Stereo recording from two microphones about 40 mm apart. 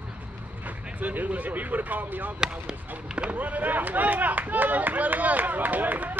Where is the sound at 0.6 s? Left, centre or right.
Right.